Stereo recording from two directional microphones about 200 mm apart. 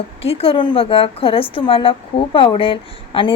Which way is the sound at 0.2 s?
30° left (ahead or behind).